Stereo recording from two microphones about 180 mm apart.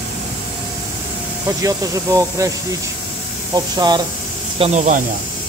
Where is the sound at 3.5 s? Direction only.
25° right (ahead or behind).